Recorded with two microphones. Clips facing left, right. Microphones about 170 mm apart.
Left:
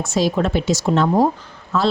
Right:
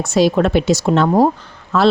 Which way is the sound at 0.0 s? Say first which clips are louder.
Right 5 dB; 70° right (ahead or behind).